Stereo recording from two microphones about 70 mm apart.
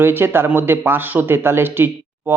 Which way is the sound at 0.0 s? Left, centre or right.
Right.